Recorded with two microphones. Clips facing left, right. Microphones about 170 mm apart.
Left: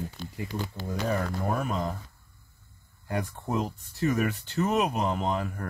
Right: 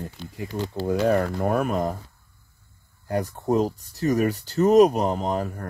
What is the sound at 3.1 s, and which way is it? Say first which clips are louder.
Speech: right 7 dB; 40° right (ahead or behind).